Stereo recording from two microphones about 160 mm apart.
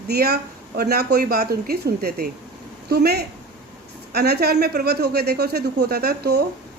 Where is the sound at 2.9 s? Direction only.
90° right.